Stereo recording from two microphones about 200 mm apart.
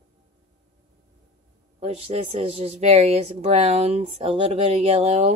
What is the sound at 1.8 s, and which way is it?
Speech, 30° right (ahead or behind).